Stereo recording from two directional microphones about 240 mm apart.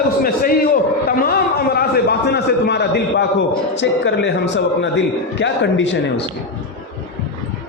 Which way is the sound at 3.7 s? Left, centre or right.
Left.